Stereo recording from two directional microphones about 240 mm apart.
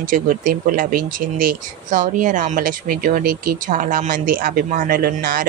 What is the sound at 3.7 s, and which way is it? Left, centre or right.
Speech, right.